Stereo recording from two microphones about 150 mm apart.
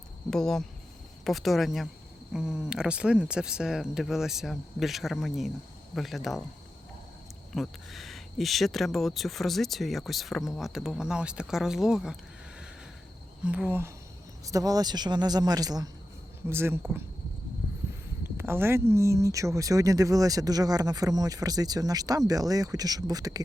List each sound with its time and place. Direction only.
0.3 s speech: 5° left (ahead or behind)
7.5 s speech: centre (ahead or behind)
13.4 s speech: 10° right (ahead or behind)
14.4 s speech: 25° right (ahead or behind)
18.2 s speech: 15° right (ahead or behind)